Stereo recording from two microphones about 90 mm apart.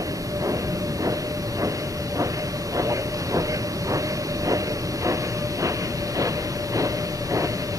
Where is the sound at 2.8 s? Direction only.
35° right (ahead or behind).